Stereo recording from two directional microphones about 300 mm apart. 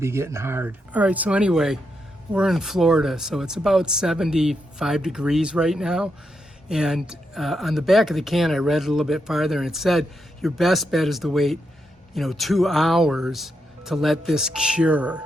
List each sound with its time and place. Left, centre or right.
0.0 s speech: centre